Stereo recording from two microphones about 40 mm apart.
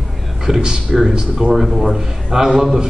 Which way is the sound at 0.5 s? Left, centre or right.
Centre.